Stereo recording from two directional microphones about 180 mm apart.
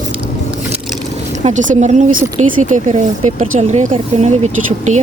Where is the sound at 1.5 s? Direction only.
45° right (ahead or behind).